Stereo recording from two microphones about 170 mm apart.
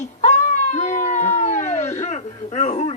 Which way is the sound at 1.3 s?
45° left (ahead or behind).